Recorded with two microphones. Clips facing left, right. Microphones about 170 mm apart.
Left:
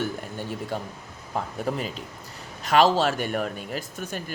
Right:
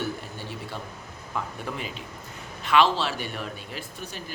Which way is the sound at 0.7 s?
45° left (ahead or behind).